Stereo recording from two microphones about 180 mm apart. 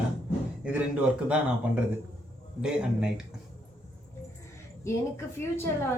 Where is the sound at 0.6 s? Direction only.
5° right (ahead or behind).